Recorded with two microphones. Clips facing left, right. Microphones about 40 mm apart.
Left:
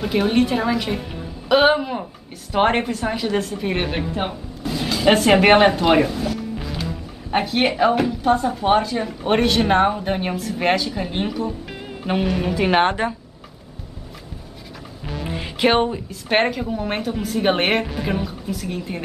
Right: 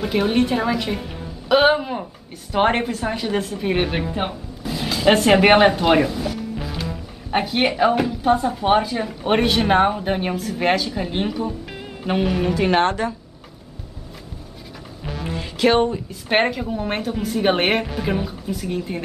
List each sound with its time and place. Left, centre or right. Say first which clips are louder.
0.0 s a woman's voice: left 1 dB; centre
12.8 s speech: left 1 dB; left
15.0 s music: even; centre
15.3 s music: right 1 dB; centre
16.1 s a woman's voice: even; centre